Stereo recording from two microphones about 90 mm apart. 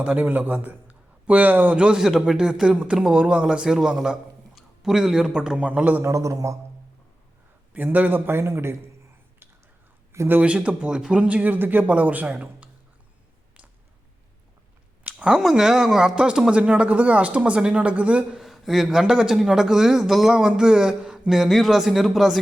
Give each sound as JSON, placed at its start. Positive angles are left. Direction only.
{"t": 0.0, "sound": "a man's voice", "side_deg": -15}
{"t": 6.0, "sound": "a man's voice", "side_deg": -35}
{"t": 7.7, "sound": "a man's voice", "side_deg": -20}
{"t": 10.1, "sound": "speech", "side_deg": -25}
{"t": 15.0, "sound": "speech", "side_deg": -10}
{"t": 18.3, "sound": "speech", "side_deg": 0}